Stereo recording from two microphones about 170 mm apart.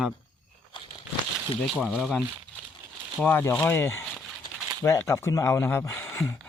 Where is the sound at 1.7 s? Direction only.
Centre (ahead or behind).